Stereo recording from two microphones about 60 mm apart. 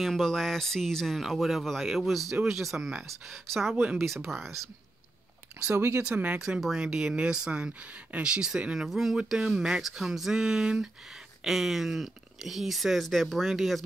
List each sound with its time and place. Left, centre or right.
0.0 s speech: centre
5.7 s speech: right
6.3 s speech: centre